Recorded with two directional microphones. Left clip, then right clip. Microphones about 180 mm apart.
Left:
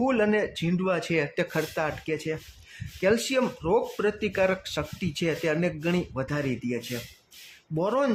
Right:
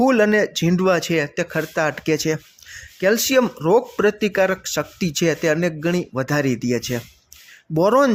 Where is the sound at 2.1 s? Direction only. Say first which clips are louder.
Right 10 dB; 35° right (ahead or behind).